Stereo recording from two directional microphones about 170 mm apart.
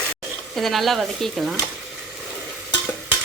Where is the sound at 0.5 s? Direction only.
Centre (ahead or behind).